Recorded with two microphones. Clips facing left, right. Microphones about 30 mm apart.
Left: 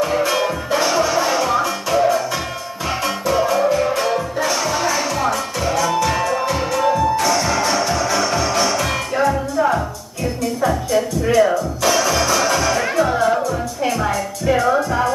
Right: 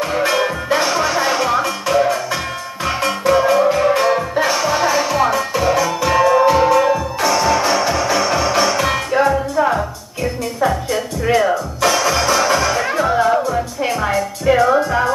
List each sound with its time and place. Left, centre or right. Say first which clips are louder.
0.7 s music: even; centre